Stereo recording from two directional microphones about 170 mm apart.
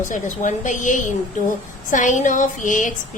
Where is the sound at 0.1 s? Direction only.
50° left (ahead or behind).